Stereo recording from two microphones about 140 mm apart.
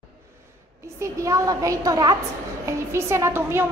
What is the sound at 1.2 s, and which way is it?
A woman's voice, 25° right (ahead or behind).